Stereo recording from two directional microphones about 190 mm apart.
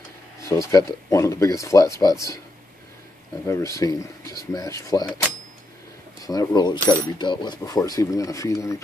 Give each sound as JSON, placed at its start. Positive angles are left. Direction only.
{"t": 0.4, "sound": "speech", "side_deg": 15}
{"t": 3.4, "sound": "speech", "side_deg": 15}
{"t": 6.2, "sound": "speech", "side_deg": 20}